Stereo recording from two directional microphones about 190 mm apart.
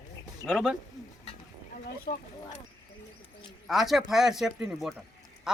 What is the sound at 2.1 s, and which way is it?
Speech, 50° left (ahead or behind).